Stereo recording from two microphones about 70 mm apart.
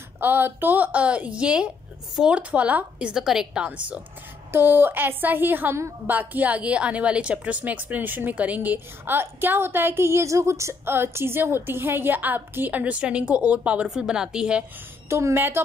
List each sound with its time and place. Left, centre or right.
0.2 s a woman's voice: right
4.5 s a woman's voice: right; by 14.6 s centre
15.0 s a woman's voice: right